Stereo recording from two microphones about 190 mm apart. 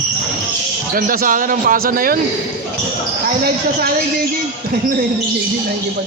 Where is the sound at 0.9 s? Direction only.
50° right (ahead or behind).